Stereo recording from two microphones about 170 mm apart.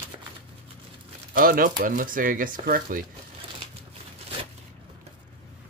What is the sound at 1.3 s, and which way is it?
Speech, 55° right (ahead or behind).